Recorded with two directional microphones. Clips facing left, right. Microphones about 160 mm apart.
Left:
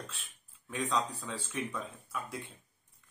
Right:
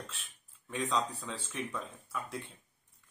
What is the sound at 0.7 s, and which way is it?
A man's voice, centre (ahead or behind).